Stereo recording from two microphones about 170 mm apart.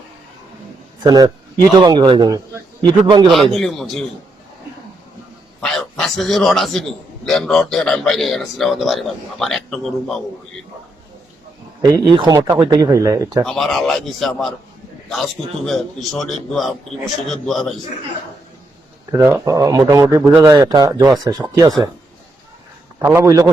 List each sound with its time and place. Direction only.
1.0 s a man's voice: 25° right (ahead or behind)
3.2 s a man's voice: centre (ahead or behind)
5.5 s a sound: 5° left (ahead or behind)
7.3 s a man's voice: centre (ahead or behind)
11.8 s a man's voice: 25° right (ahead or behind)
13.4 s a man's voice: centre (ahead or behind)
19.1 s a man's voice: 15° right (ahead or behind)
23.0 s a man's voice: 15° right (ahead or behind)